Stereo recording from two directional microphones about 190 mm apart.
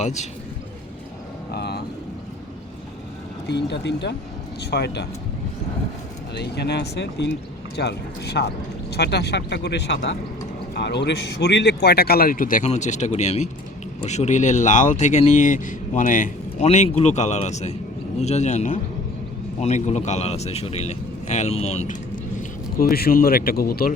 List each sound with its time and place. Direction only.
0.0 s a man's voice: 35° left (ahead or behind)
1.5 s vehicle: 60° left (ahead or behind)
3.4 s speech: 65° left (ahead or behind)
6.3 s speech: 60° left (ahead or behind); by 22.2 s 40° left (ahead or behind)
22.8 s speech: 55° left (ahead or behind)